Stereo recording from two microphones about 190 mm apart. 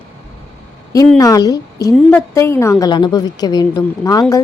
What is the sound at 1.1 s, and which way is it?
A woman's voice, 20° left (ahead or behind).